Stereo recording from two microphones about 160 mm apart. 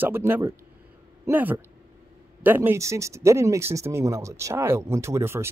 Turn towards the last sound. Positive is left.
turn(degrees=-15)  # may be behind; listen again after turning